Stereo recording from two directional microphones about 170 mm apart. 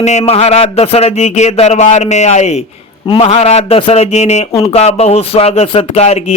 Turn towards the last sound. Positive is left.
turn(degrees=35)  # may be behind; listen again after turning